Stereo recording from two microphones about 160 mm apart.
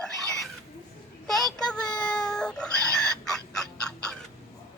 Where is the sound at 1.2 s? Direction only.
Centre (ahead or behind).